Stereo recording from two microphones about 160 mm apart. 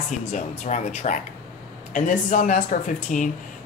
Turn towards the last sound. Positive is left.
turn(degrees=50)  # may be behind; listen again after turning